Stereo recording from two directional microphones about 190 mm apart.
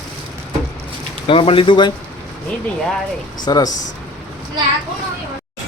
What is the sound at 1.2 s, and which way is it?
Speech, 30° left (ahead or behind).